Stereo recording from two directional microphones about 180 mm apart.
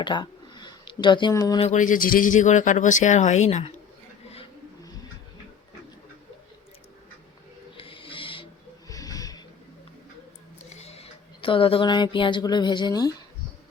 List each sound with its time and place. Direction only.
0.0 s a sound: 25° left (ahead or behind)
1.6 s speech: 45° left (ahead or behind)
7.8 s owl: 30° left (ahead or behind)
8.9 s snort: 20° left (ahead or behind)
10.7 s speech: 35° left (ahead or behind)